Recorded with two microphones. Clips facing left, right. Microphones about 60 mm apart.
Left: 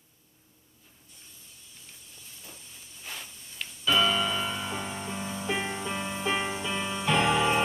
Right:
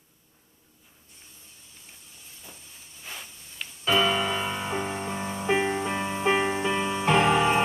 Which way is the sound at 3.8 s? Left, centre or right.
Right.